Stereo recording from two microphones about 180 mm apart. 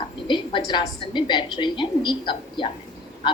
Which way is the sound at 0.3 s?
25° left (ahead or behind).